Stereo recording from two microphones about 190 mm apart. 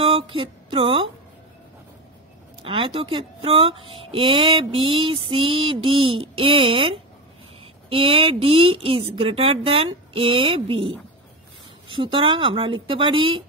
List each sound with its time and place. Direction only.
0.0 s speech: 30° right (ahead or behind)
2.6 s speech: 30° right (ahead or behind)